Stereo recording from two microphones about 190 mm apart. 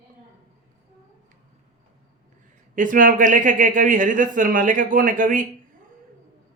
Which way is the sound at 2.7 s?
45° right (ahead or behind).